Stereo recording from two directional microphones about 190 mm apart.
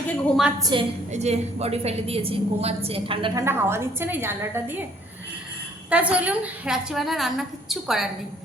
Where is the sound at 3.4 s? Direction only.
15° right (ahead or behind).